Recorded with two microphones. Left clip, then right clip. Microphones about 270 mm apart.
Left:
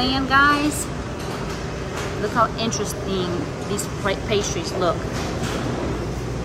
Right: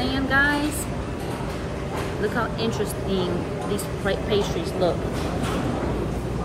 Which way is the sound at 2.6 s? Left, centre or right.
Left.